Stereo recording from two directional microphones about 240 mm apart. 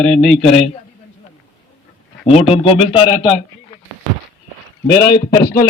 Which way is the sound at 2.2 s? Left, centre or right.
Left.